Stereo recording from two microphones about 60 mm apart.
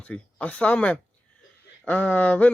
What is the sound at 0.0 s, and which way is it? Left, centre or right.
Speech, left.